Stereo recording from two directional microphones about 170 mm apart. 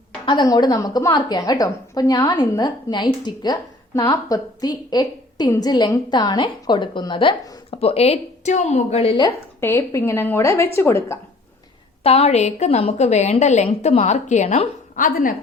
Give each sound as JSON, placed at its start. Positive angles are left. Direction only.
{"t": 0.3, "sound": "a woman's voice", "side_deg": 25}
{"t": 9.6, "sound": "a woman's voice", "side_deg": 15}
{"t": 12.0, "sound": "a woman's voice", "side_deg": 40}